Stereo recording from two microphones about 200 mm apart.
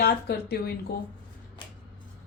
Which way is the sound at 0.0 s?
50° left (ahead or behind).